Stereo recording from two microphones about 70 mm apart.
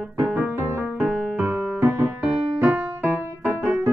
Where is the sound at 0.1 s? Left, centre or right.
Right.